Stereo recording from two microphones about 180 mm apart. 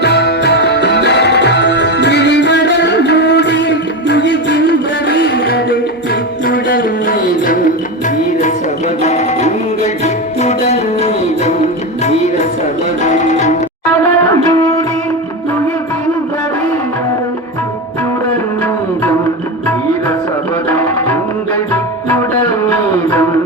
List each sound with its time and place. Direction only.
0.0 s music: 65° left (ahead or behind)
4.2 s music: 90° right
4.5 s a sound: 65° left (ahead or behind)
5.2 s music: 65° left (ahead or behind)
9.0 s music: 40° left (ahead or behind)
14.3 s music: 20° left (ahead or behind)
20.7 s music: 10° left (ahead or behind)